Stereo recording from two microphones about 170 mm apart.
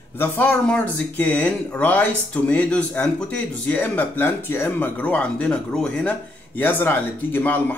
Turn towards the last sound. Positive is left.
turn(degrees=10)  # may be behind; listen again after turning